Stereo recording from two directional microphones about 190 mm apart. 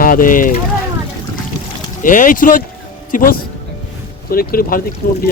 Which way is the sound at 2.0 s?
45° left (ahead or behind).